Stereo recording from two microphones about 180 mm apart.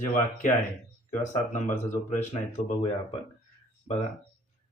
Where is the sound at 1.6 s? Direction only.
10° left (ahead or behind).